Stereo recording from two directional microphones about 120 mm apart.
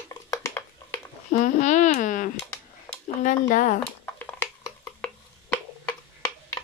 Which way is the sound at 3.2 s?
90° left.